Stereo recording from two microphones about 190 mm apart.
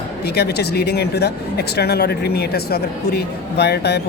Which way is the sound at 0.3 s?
60° left (ahead or behind).